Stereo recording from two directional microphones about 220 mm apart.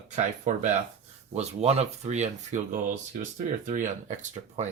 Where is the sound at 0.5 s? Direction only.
35° right (ahead or behind).